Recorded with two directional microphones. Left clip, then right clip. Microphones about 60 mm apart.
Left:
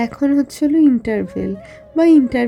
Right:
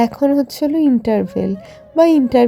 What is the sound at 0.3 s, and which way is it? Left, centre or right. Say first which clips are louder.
A woman's voice: right 1 dB; right.